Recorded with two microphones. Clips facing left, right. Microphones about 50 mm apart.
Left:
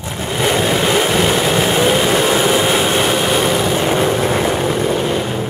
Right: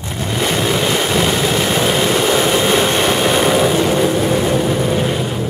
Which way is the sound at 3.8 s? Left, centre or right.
Left.